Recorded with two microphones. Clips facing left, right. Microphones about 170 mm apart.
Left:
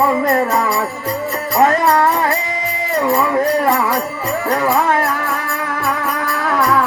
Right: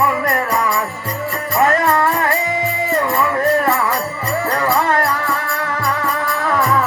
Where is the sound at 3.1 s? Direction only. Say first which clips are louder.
Left 2 dB; 15° left (ahead or behind).